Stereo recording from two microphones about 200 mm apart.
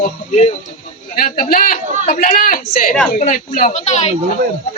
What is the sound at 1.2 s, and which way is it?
A man's voice, 45° left (ahead or behind).